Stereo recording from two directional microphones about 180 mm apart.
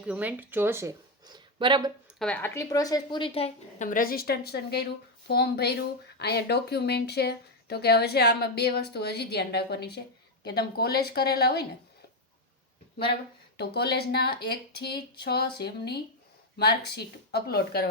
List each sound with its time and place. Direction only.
0.0 s speech: 5° right (ahead or behind); by 1.9 s 25° right (ahead or behind)
2.1 s a woman's voice: 5° left (ahead or behind); by 3.8 s 35° left (ahead or behind)
3.8 s speech: 50° left (ahead or behind)
13.6 s speech: 65° left (ahead or behind)